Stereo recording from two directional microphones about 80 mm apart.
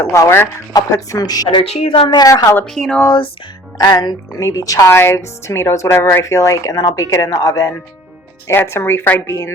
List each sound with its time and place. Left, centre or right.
0.0 s speech: left
0.7 s speech: left
1.5 s a woman's voice: left
2.7 s speech: centre
3.8 s speech: left
4.9 s speech: left
8.4 s speech: left